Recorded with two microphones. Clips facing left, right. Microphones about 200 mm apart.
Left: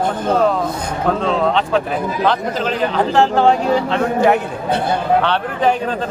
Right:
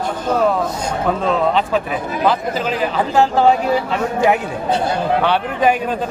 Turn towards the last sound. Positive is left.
turn(degrees=-10)  # may be behind; listen again after turning